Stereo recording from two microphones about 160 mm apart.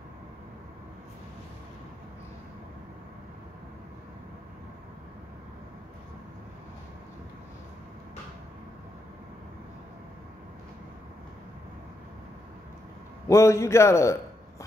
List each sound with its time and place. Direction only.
13.3 s a man's voice: 15° left (ahead or behind)